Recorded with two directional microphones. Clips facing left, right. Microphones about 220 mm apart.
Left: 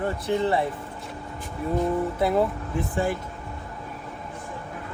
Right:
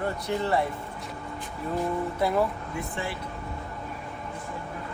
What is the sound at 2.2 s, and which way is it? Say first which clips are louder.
Speech: left 1 dB; 25° left (ahead or behind).